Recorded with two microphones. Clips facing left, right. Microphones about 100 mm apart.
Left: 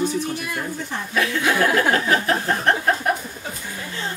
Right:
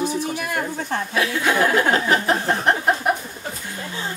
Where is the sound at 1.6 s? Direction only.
20° right (ahead or behind).